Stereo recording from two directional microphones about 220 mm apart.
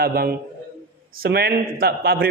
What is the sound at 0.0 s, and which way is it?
A man's voice, 45° right (ahead or behind).